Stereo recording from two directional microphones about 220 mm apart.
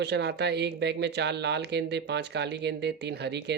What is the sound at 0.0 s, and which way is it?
Speech, 50° right (ahead or behind).